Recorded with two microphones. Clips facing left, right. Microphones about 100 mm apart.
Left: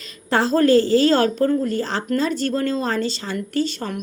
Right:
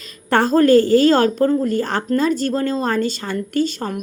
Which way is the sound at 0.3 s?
50° right (ahead or behind).